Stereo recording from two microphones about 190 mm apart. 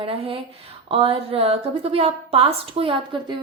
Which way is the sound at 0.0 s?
30° right (ahead or behind).